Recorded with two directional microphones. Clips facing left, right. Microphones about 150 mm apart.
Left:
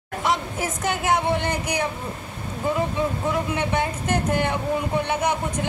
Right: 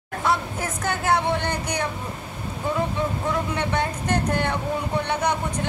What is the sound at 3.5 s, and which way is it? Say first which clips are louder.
Speech: left 1 dB; 15° left (ahead or behind).